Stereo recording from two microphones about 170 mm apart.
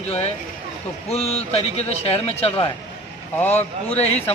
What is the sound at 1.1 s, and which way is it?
Speech, 35° left (ahead or behind).